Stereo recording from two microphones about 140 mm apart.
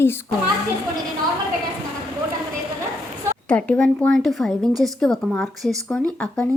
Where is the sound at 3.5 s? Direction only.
10° left (ahead or behind).